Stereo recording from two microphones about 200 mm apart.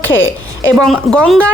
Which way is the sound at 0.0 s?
70° left (ahead or behind).